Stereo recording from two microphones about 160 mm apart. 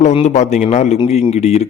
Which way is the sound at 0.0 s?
45° left (ahead or behind).